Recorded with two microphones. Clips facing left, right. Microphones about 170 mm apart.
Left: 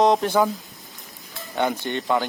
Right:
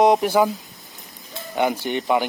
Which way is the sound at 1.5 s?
10° right (ahead or behind).